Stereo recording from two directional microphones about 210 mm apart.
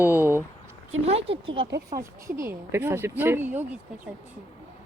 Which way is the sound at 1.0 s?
25° right (ahead or behind).